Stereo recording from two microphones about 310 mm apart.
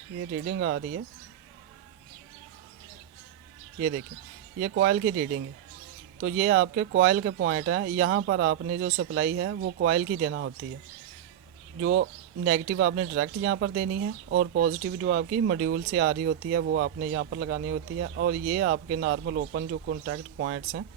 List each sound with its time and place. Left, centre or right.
0.4 s speech: right
3.8 s speech: right
11.8 s speech: right
14.7 s speech: right